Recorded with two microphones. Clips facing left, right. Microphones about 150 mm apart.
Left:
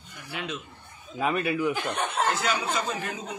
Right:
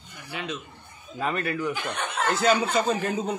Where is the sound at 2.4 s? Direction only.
45° right (ahead or behind).